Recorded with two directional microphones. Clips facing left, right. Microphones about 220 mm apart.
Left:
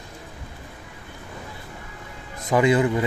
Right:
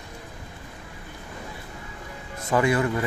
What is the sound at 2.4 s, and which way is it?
Speech, 20° left (ahead or behind).